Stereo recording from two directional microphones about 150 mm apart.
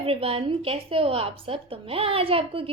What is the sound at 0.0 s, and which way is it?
A woman's voice, 40° right (ahead or behind).